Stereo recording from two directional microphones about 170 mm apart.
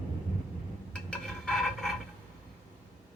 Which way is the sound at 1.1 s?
Centre (ahead or behind).